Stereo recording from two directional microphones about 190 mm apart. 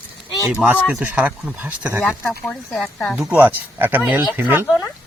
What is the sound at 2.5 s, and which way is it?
Speech, 5° left (ahead or behind).